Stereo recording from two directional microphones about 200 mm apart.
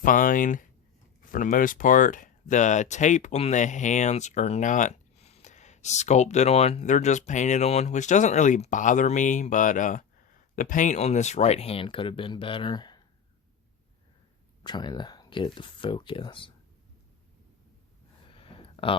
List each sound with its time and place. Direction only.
0.0 s speech: 40° left (ahead or behind); by 13.0 s 20° left (ahead or behind)
14.6 s speech: 20° left (ahead or behind)
18.3 s a sound: 25° left (ahead or behind)